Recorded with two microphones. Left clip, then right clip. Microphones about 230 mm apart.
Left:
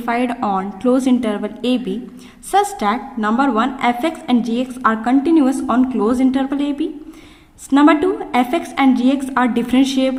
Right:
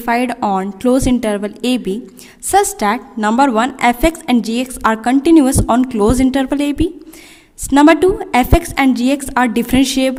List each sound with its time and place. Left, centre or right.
0.0 s a woman's voice: right